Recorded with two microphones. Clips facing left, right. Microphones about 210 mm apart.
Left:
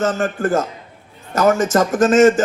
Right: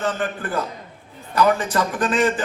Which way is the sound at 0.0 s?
45° left (ahead or behind).